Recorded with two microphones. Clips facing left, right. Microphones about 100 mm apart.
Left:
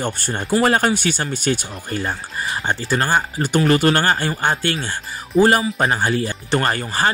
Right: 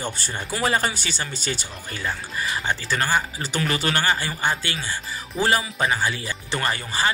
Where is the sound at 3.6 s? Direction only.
40° left (ahead or behind).